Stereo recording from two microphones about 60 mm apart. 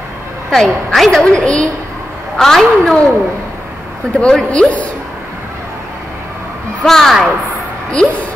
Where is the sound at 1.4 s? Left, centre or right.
Centre.